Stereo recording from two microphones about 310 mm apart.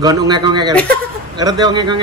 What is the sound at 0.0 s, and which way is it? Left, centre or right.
Speech, centre.